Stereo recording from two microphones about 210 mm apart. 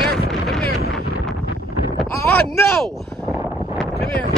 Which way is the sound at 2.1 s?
10° left (ahead or behind).